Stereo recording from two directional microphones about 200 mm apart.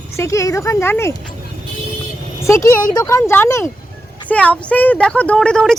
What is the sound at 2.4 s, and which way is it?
Speech, 15° left (ahead or behind).